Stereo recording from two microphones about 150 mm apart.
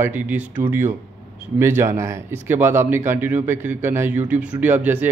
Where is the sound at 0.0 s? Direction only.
10° right (ahead or behind).